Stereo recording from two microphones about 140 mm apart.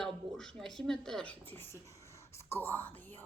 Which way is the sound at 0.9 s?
5° left (ahead or behind).